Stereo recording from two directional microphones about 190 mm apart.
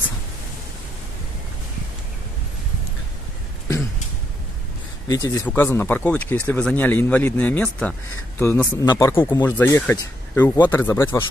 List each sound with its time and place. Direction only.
5.0 s speech: 20° left (ahead or behind)